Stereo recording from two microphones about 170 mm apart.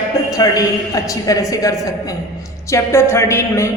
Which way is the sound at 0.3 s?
20° left (ahead or behind).